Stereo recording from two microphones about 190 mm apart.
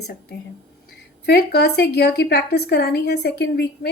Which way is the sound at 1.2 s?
60° left (ahead or behind).